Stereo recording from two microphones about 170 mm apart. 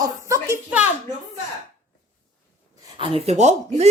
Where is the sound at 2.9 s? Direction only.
35° right (ahead or behind).